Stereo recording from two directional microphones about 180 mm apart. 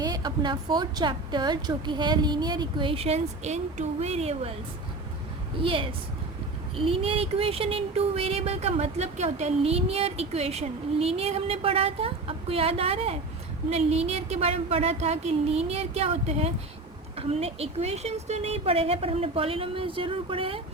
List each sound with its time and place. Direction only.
0.0 s a woman's voice: 20° right (ahead or behind)
5.6 s a woman's voice: 30° right (ahead or behind)